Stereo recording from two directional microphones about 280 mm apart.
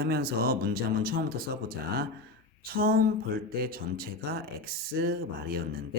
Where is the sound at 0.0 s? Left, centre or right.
Right.